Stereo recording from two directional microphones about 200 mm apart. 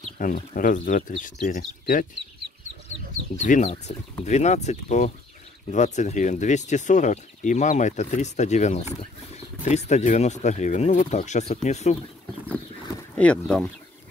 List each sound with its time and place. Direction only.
0.2 s speech: 40° left (ahead or behind)
3.3 s speech: 40° left (ahead or behind)
13.1 s speech: 5° left (ahead or behind)